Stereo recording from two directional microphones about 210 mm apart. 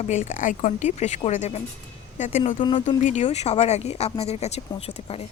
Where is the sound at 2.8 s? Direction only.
35° left (ahead or behind).